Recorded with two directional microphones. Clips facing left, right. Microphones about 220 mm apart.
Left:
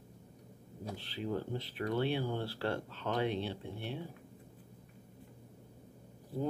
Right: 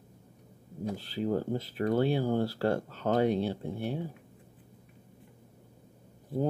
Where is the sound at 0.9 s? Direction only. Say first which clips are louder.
Right 6 dB; 40° right (ahead or behind).